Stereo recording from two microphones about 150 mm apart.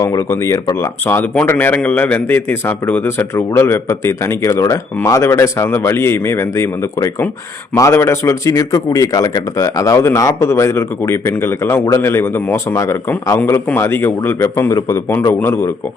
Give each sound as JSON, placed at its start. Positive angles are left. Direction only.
{"t": 0.0, "sound": "a man's voice", "side_deg": 20}